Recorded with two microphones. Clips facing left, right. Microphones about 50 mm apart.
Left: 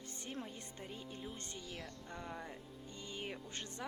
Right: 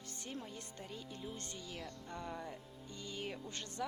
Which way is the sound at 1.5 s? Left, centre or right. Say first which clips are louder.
Right 1 dB; centre.